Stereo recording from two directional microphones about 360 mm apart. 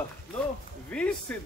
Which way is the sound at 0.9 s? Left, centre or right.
Centre.